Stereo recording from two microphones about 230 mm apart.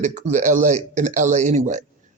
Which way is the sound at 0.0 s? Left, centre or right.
Right.